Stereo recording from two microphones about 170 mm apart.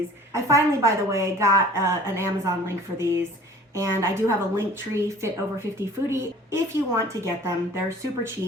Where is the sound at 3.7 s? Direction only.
20° right (ahead or behind).